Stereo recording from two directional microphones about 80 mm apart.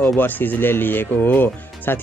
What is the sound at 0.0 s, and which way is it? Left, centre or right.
Speech, left.